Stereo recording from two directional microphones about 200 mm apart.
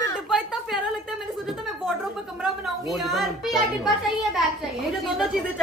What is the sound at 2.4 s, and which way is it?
A woman's voice, centre (ahead or behind).